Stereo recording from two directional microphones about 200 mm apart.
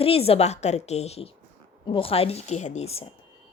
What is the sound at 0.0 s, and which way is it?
A woman's voice, 30° left (ahead or behind).